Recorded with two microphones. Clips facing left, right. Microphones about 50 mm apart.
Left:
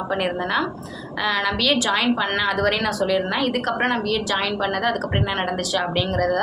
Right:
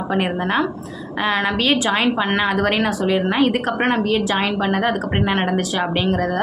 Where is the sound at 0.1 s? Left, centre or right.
Right.